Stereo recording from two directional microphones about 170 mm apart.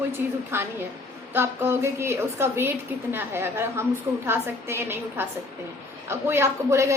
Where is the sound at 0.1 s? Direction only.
15° right (ahead or behind).